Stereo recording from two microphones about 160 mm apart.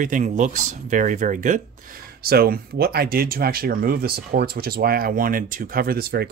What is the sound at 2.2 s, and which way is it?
Speech, 70° right (ahead or behind).